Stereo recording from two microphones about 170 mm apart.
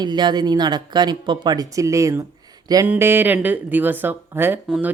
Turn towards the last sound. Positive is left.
turn(degrees=-10)  # may be behind; listen again after turning